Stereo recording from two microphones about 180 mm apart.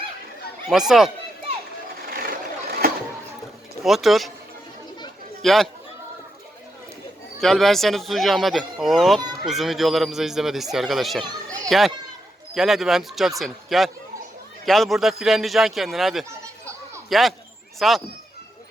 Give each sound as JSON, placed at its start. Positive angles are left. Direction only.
{"t": 0.7, "sound": "speech", "side_deg": 0}
{"t": 2.0, "sound": "vehicle", "side_deg": -55}
{"t": 3.8, "sound": "speech", "side_deg": 0}
{"t": 5.4, "sound": "a man's voice", "side_deg": 0}
{"t": 7.4, "sound": "speech", "side_deg": 0}
{"t": 11.2, "sound": "children playing", "side_deg": -25}
{"t": 12.5, "sound": "speech", "side_deg": 0}